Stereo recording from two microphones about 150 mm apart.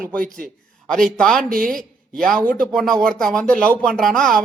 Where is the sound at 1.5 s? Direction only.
70° right (ahead or behind).